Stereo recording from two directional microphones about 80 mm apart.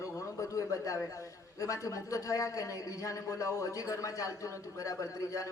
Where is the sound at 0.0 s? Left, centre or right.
Left.